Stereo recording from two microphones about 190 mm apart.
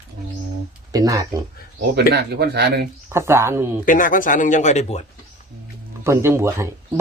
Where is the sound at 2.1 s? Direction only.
60° right (ahead or behind).